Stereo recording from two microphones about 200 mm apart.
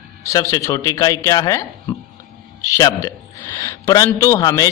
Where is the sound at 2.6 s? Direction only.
15° left (ahead or behind).